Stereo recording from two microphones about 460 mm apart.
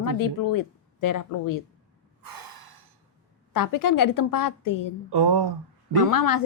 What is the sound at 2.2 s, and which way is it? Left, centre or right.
Snort, right.